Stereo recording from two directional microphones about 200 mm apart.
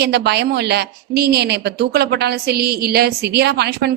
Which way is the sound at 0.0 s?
55° right (ahead or behind).